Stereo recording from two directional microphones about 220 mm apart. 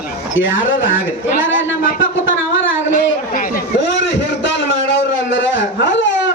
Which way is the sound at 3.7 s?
55° left (ahead or behind).